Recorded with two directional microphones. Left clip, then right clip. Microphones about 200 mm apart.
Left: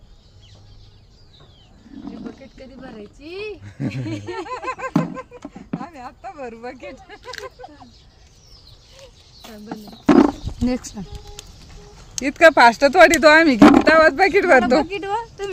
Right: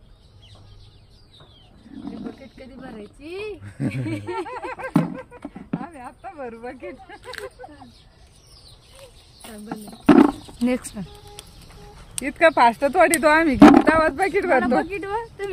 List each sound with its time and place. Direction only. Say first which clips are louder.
2.0 s speech: even; 5° left (ahead or behind)
4.3 s a sound: left 4 dB; 60° left (ahead or behind)
4.9 s a sound: left 1 dB; centre (ahead or behind)
5.8 s speech: left 2 dB; 60° left (ahead or behind)
7.2 s speech: left 2 dB; centre (ahead or behind)
9.0 s roaring cats: left 2 dB; 5° left (ahead or behind)
10.7 s speech: right 1 dB; 5° right (ahead or behind)
12.2 s speech: left 5 dB; 60° left (ahead or behind)
13.6 s speech: even; 5° left (ahead or behind)
13.8 s speech: left 6 dB; 60° left (ahead or behind)